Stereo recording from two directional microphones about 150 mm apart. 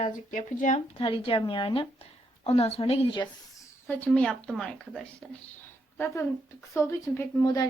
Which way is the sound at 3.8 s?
15° left (ahead or behind).